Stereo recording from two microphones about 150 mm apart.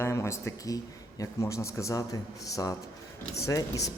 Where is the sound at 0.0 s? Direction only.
20° left (ahead or behind).